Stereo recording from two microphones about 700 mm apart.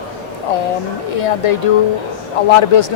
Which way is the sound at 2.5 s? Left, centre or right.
Left.